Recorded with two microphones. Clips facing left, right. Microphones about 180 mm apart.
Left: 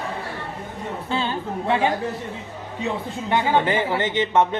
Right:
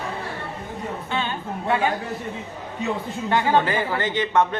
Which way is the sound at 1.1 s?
30° left (ahead or behind).